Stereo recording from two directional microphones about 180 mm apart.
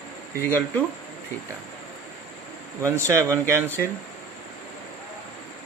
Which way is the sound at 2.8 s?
15° right (ahead or behind).